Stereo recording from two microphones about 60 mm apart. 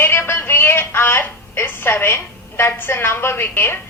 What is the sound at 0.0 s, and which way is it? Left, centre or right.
A woman's voice, left.